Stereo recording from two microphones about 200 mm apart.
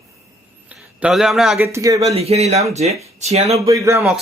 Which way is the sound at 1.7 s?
15° right (ahead or behind).